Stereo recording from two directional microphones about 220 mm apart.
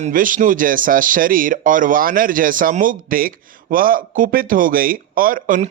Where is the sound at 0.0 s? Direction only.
40° right (ahead or behind).